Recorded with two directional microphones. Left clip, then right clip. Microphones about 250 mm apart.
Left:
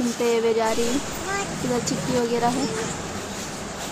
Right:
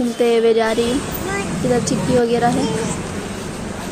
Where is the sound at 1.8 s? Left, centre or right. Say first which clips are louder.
Right 7 dB; centre.